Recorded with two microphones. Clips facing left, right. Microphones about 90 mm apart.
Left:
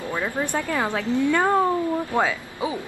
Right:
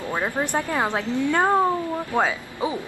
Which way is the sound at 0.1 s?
20° right (ahead or behind).